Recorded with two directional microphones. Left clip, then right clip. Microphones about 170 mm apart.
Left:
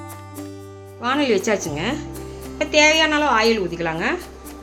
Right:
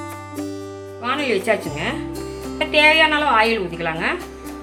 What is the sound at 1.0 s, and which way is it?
Speech, 50° left (ahead or behind).